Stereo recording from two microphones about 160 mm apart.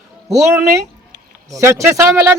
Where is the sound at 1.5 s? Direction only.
20° right (ahead or behind).